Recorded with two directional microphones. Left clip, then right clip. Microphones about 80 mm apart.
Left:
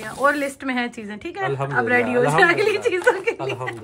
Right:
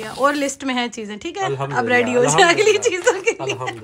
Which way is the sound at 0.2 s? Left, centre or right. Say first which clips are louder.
Right 1 dB; centre.